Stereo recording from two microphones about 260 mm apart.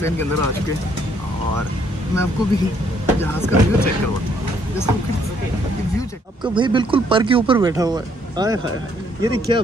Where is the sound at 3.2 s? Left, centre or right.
Centre.